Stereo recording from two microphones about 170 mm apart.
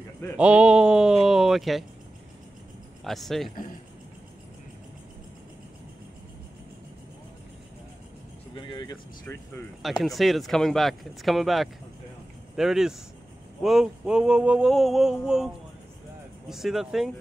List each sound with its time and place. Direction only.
0.4 s speech: 5° right (ahead or behind)
3.0 s speech: centre (ahead or behind)
8.5 s vehicle: 25° left (ahead or behind)
9.8 s speech: centre (ahead or behind)